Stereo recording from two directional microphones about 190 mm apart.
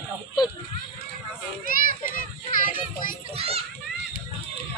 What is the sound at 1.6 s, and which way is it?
Children playing, 45° left (ahead or behind).